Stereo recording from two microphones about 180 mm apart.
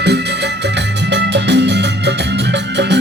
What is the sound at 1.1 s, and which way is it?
Music, 75° right (ahead or behind).